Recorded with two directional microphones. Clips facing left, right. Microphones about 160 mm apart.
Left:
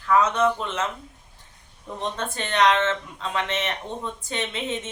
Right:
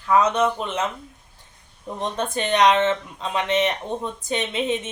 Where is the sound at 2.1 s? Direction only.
15° right (ahead or behind).